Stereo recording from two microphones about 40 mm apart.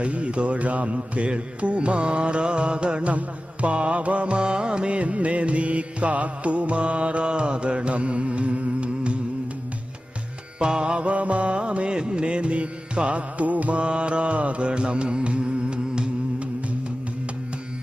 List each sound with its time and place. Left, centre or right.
0.0 s music: right
10.6 s music: right